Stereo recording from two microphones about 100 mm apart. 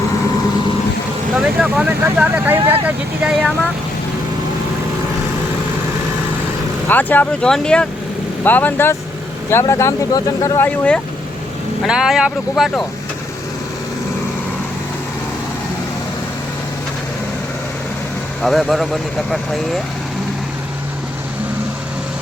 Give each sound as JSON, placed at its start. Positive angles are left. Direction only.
{"t": 1.3, "sound": "speech", "side_deg": -5}
{"t": 6.8, "sound": "speech", "side_deg": 15}
{"t": 10.6, "sound": "speech", "side_deg": 10}
{"t": 11.9, "sound": "speech", "side_deg": -5}
{"t": 18.4, "sound": "speech", "side_deg": 0}